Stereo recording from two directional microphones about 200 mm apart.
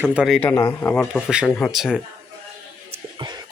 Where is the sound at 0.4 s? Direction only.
10° left (ahead or behind).